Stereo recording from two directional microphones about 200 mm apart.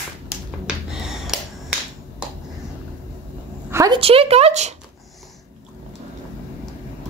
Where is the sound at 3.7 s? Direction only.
15° right (ahead or behind).